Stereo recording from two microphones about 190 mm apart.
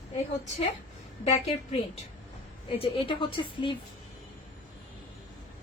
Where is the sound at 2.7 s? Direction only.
30° left (ahead or behind).